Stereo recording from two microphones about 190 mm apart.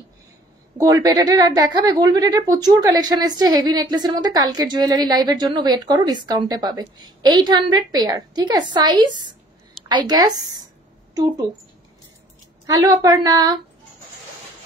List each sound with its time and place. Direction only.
0.7 s a woman's voice: 20° right (ahead or behind)
12.6 s a woman's voice: 20° right (ahead or behind)